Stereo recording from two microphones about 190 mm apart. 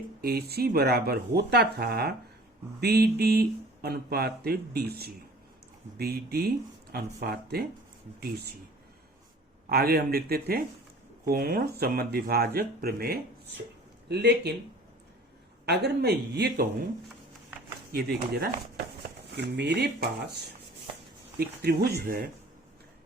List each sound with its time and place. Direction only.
0.2 s speech: 55° right (ahead or behind)
9.6 s speech: 55° right (ahead or behind)
15.6 s speech: 60° right (ahead or behind)
18.3 s speech: 55° right (ahead or behind)
21.3 s speech: 55° right (ahead or behind)